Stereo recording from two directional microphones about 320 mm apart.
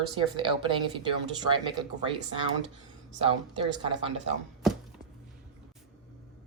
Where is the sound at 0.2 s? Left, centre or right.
Centre.